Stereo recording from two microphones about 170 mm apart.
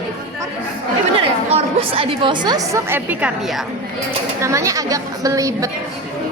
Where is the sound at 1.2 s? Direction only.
30° right (ahead or behind); by 3.3 s 10° right (ahead or behind).